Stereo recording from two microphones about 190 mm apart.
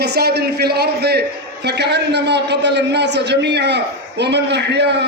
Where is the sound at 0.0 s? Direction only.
60° right (ahead or behind).